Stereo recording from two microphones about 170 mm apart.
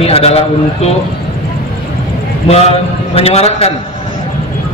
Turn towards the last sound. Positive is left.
turn(degrees=35)  # may be behind; listen again after turning